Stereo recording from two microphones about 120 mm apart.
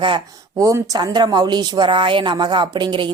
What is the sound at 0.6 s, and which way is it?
A woman's voice, 25° right (ahead or behind).